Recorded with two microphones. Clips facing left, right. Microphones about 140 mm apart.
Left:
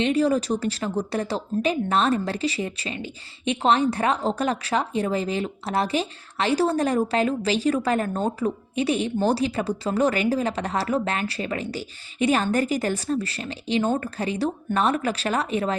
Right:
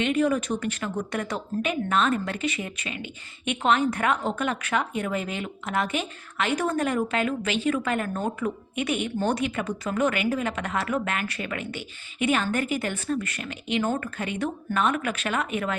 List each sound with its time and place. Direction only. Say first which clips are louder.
0.0 s speech: left 2 dB; 35° left (ahead or behind)